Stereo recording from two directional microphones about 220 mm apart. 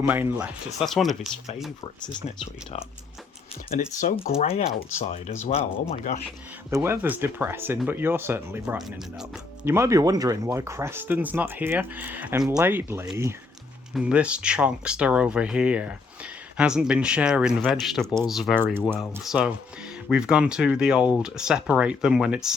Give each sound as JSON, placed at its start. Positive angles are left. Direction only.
{"t": 0.0, "sound": "speech", "side_deg": -10}
{"t": 2.2, "sound": "speech", "side_deg": 25}
{"t": 3.7, "sound": "speech", "side_deg": 40}
{"t": 6.7, "sound": "speech", "side_deg": -10}
{"t": 18.8, "sound": "speech", "side_deg": 5}